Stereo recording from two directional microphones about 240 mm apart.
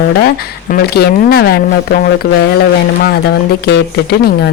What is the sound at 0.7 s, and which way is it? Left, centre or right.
Speech, left.